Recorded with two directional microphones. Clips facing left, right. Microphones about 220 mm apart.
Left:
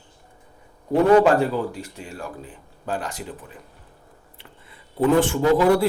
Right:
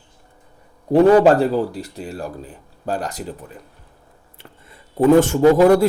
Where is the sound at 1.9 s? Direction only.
35° right (ahead or behind).